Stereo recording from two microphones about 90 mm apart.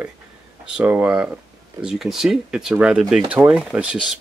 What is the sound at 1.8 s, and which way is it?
Speech, 5° right (ahead or behind).